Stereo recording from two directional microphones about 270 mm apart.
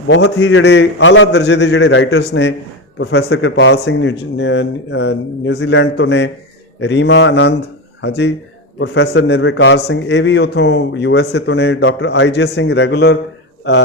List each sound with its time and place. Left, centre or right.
0.1 s a man's voice: left